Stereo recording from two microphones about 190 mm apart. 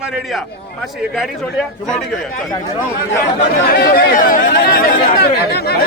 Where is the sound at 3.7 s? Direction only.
55° left (ahead or behind).